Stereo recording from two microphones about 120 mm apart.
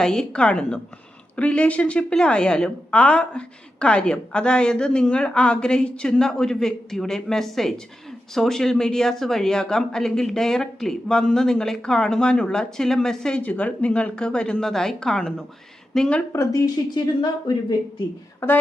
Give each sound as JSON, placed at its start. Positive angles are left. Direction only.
{"t": 0.0, "sound": "a woman's voice", "side_deg": 5}
{"t": 16.3, "sound": "a woman's voice", "side_deg": 25}
{"t": 18.3, "sound": "speech", "side_deg": 15}